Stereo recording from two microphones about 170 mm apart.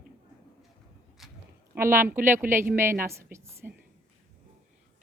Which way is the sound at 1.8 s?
15° right (ahead or behind).